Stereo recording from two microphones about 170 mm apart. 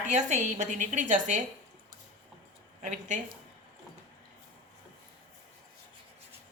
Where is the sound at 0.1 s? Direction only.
45° right (ahead or behind).